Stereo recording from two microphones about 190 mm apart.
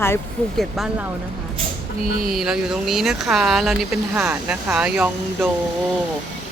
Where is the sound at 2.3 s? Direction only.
Centre (ahead or behind).